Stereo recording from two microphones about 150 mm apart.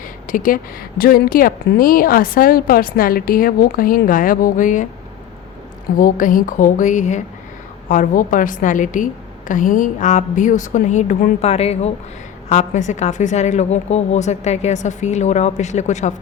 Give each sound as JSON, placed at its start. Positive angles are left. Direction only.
{"t": 0.3, "sound": "a woman's voice", "side_deg": 65}
{"t": 6.0, "sound": "a woman's voice", "side_deg": 65}